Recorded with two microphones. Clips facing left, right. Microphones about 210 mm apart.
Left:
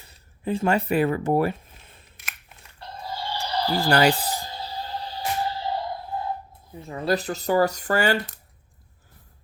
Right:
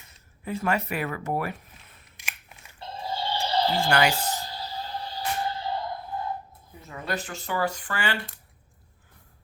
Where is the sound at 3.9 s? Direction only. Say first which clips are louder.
Left 6 dB; 35° left (ahead or behind).